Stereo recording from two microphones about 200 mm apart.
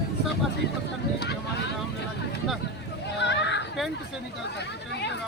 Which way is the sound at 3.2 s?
60° left (ahead or behind).